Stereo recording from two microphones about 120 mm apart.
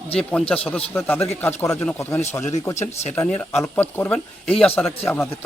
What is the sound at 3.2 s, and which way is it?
A man's voice, 15° left (ahead or behind).